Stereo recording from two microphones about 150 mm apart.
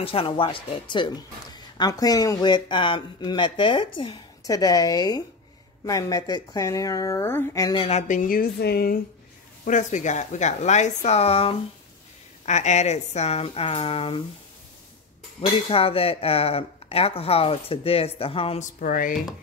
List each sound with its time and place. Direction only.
0.0 s speech: 40° left (ahead or behind)
7.8 s speech: 50° left (ahead or behind); by 9.0 s 90° left
9.7 s speech: 55° left (ahead or behind); by 14.2 s 40° left (ahead or behind)
15.4 s speech: 40° left (ahead or behind)
18.6 s speech: 60° left (ahead or behind)